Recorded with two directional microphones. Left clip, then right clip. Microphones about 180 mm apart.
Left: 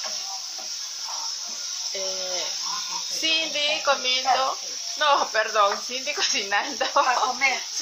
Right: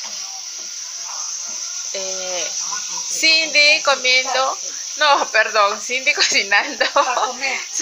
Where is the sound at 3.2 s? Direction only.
10° right (ahead or behind).